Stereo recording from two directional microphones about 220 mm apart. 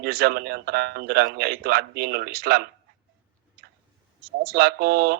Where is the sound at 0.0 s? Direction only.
45° right (ahead or behind).